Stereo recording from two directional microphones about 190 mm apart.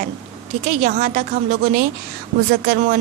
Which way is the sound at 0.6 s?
40° right (ahead or behind).